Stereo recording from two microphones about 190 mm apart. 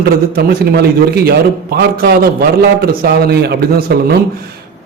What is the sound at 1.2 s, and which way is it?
Speech, 55° right (ahead or behind).